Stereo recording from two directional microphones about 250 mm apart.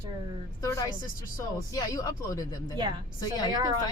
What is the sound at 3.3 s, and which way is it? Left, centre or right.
Speech, centre.